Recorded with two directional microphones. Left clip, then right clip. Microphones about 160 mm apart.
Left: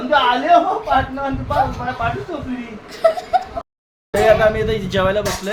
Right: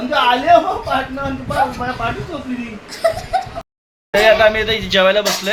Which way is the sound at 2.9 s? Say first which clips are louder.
Left 2 dB; 35° left (ahead or behind).